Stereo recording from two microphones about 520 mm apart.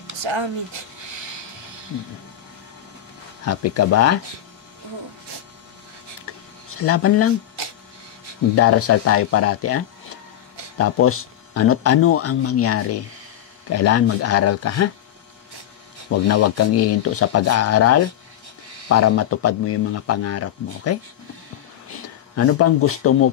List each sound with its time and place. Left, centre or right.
0.2 s speech: right
3.4 s speech: left
6.3 s a sound: left
6.8 s speech: left
8.5 s speech: left
16.3 s speech: left
22.3 s speech: left